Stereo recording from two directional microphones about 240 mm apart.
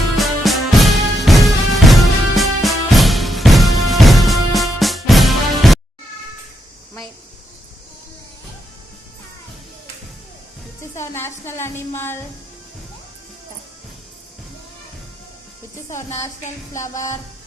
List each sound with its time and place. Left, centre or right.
0.2 s music: centre
10.9 s a woman's voice: centre
15.9 s a woman's voice: left
16.7 s music: centre